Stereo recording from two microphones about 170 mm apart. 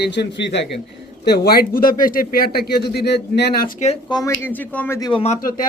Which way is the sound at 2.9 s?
75° left (ahead or behind).